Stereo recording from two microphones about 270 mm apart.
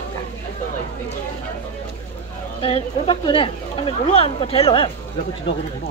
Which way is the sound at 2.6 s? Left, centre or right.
Left.